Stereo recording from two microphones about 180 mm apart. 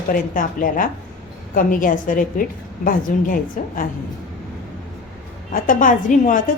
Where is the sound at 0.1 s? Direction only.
50° left (ahead or behind).